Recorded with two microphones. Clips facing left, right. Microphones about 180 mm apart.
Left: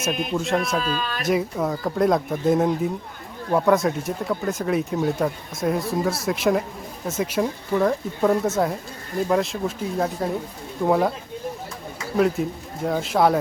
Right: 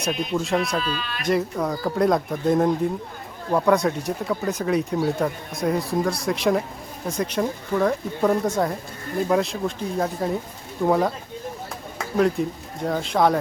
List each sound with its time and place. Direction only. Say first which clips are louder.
0.0 s speech: even; centre (ahead or behind)
0.8 s speech: left 2 dB; 45° left (ahead or behind)
1.2 s speech: right 1 dB; 5° left (ahead or behind)
12.1 s speech: even; 5° left (ahead or behind)